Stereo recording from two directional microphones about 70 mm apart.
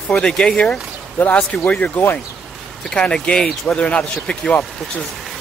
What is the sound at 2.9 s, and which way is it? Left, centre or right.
Speech, centre.